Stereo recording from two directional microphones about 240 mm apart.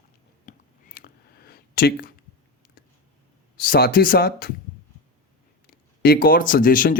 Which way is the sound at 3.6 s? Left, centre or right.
Left.